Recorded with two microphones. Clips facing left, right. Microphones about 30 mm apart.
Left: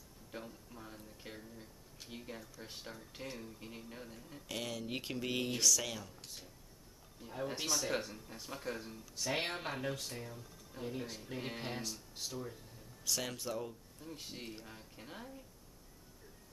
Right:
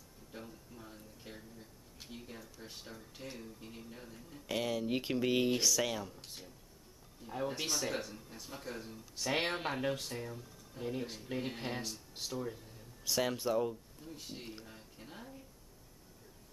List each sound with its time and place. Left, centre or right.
0.4 s speech: centre
4.5 s speech: centre
7.2 s speech: centre
9.1 s speech: centre
11.3 s music: centre
11.7 s speech: centre
14.0 s speech: centre